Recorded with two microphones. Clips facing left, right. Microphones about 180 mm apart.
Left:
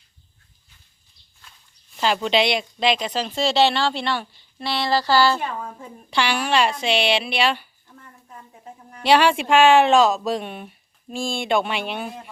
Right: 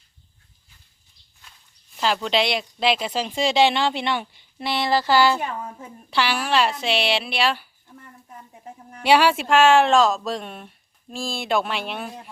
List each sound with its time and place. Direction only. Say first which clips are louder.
2.1 s speech: left 4 dB; centre (ahead or behind); by 5.5 s 15° right (ahead or behind)
6.1 s speech: left 1 dB; 5° right (ahead or behind)
9.0 s speech: even; 10° right (ahead or behind)